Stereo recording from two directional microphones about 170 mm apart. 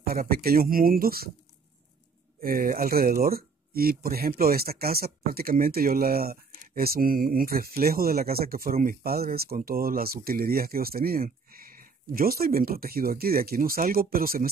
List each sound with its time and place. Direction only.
0.0 s speech: 60° right (ahead or behind)
2.4 s speech: 55° right (ahead or behind)